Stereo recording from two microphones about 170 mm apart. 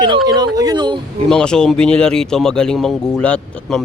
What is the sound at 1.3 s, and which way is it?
Speech, 5° left (ahead or behind).